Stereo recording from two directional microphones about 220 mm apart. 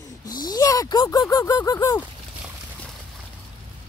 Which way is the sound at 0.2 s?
15° left (ahead or behind).